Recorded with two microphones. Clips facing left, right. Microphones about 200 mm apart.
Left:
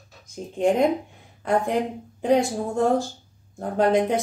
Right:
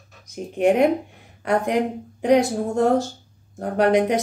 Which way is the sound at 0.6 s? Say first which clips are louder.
Right 3 dB; 70° right (ahead or behind).